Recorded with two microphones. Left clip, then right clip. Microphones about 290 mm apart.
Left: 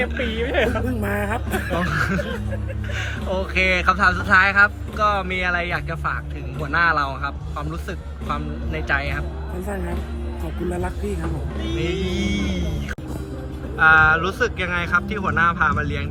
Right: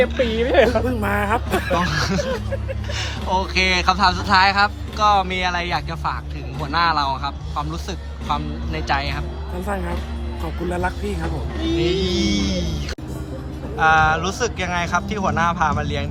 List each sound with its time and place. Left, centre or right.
0.3 s speech: left
0.9 s speech: centre